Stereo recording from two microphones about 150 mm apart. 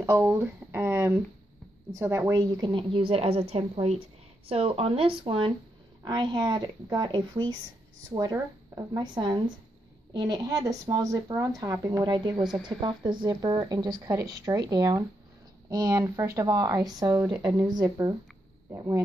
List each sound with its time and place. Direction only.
0.0 s a woman's voice: 15° right (ahead or behind)